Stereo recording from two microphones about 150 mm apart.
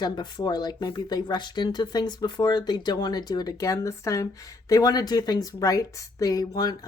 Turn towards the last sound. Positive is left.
turn(degrees=25)  # may be behind; listen again after turning